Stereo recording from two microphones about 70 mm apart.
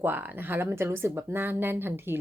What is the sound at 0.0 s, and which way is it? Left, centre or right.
Speech, right.